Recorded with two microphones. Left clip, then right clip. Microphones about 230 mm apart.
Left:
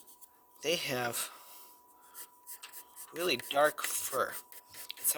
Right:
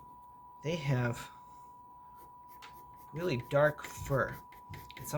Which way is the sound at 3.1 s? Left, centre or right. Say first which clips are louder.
Left 1 dB; left.